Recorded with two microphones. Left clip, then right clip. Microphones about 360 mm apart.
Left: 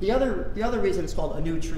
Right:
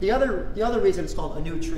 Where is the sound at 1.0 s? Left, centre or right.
Left.